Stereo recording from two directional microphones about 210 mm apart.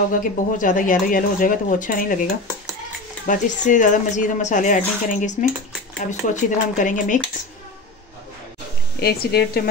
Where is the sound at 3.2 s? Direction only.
35° left (ahead or behind).